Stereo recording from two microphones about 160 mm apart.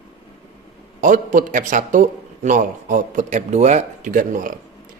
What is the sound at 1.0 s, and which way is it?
A man's voice, 55° right (ahead or behind).